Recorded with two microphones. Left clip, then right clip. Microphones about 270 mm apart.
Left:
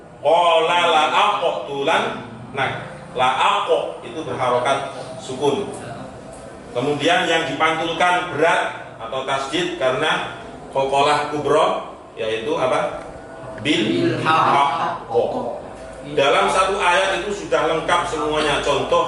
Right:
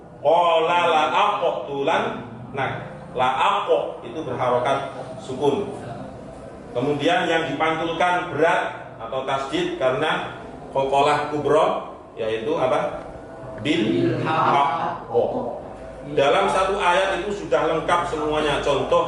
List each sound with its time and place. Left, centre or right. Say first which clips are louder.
0.3 s a sound: left 3 dB; centre
4.3 s a man's voice: left 2 dB; centre
6.7 s a man's voice: left 3 dB; centre
15.1 s speech: left 1 dB; right
16.1 s a man's voice: left 2 dB; centre